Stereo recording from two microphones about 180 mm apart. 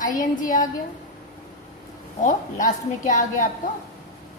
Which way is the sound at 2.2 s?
45° left (ahead or behind).